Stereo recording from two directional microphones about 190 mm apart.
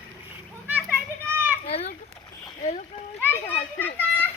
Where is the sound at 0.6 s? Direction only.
10° right (ahead or behind).